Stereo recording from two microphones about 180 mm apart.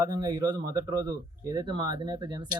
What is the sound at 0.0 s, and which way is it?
Speech, 25° right (ahead or behind).